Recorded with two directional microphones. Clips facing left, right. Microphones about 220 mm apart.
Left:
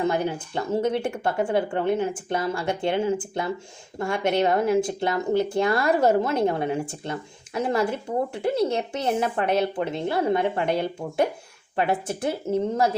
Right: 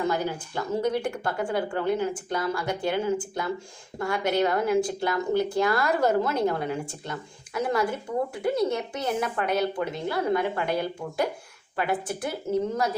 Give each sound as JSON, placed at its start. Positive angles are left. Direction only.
{"t": 0.5, "sound": "speech", "side_deg": 25}